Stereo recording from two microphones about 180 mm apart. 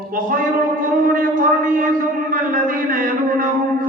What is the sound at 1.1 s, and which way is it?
Speech, 50° right (ahead or behind).